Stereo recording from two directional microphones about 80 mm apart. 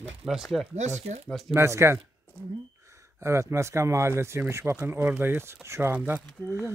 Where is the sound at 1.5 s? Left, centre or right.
Right.